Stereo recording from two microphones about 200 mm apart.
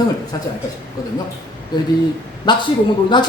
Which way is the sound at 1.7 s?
20° left (ahead or behind).